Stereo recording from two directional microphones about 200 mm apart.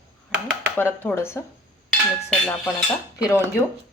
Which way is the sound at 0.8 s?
10° left (ahead or behind).